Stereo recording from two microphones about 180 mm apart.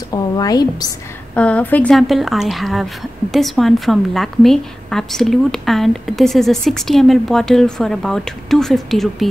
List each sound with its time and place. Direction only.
0.1 s a woman's voice: 20° left (ahead or behind)
1.3 s a woman's voice: 5° left (ahead or behind)